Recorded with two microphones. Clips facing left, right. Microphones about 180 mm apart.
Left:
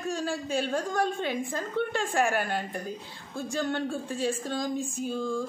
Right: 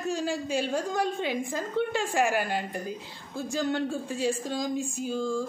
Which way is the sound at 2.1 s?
5° right (ahead or behind).